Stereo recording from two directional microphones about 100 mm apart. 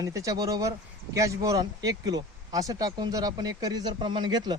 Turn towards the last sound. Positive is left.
turn(degrees=-45)  # may be behind; listen again after turning